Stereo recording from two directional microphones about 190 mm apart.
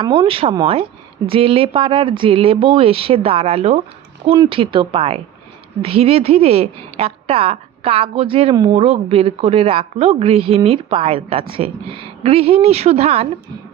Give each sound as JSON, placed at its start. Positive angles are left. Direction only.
{"t": 0.0, "sound": "a woman's voice", "side_deg": -25}